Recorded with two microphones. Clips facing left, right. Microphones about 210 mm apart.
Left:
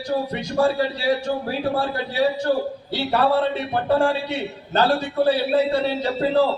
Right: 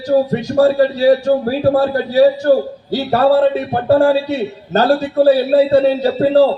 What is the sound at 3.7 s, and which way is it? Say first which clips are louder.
A man's voice: right 7 dB; 40° right (ahead or behind).